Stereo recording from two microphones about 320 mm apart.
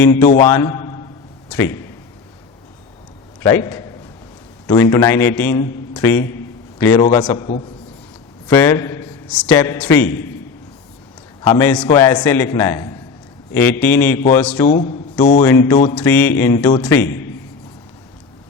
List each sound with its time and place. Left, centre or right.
0.0 s a man's voice: centre
0.4 s a sound: centre
3.4 s a man's voice: centre
11.4 s a man's voice: centre